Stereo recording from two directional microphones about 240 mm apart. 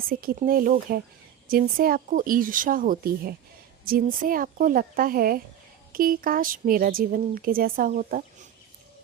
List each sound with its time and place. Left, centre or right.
0.1 s speech: right